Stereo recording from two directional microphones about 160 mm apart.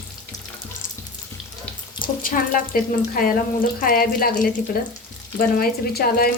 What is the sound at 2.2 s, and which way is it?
Speech, 60° left (ahead or behind).